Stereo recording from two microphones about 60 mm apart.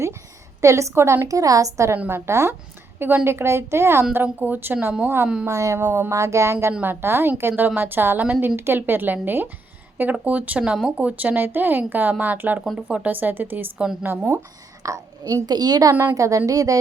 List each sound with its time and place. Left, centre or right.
0.6 s speech: right
1.3 s a woman's voice: right
2.0 s a woman's voice: right
4.1 s speech: right
5.5 s speech: right
6.8 s a woman's voice: right
14.2 s a woman's voice: right
14.8 s a woman's voice: right
16.1 s a woman's voice: right